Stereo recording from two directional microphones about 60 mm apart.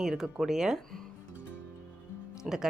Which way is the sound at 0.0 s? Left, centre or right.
Centre.